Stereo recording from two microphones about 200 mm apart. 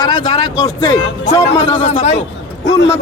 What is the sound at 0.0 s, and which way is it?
Speech, 20° left (ahead or behind).